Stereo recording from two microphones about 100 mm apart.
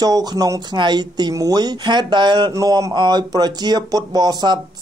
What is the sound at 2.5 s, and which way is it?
Speech, 35° right (ahead or behind).